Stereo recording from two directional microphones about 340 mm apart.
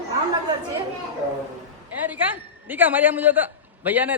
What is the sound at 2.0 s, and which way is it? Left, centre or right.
A man's voice, centre.